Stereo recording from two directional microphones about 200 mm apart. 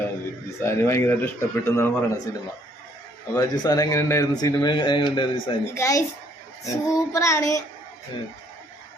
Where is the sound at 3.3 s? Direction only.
15° left (ahead or behind).